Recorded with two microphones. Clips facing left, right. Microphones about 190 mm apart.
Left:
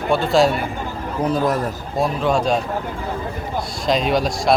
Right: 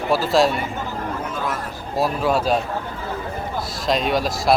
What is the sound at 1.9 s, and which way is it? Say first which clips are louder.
Speech: left 1 dB; 5° right (ahead or behind).